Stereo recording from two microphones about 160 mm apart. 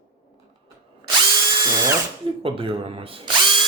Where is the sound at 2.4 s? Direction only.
35° right (ahead or behind).